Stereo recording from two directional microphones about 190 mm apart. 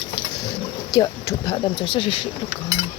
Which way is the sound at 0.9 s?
20° left (ahead or behind).